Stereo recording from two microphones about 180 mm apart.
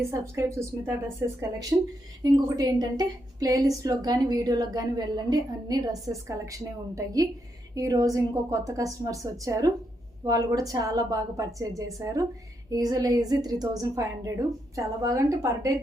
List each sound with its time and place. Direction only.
0.0 s a woman's voice: 15° right (ahead or behind)
2.2 s a woman's voice: 20° right (ahead or behind)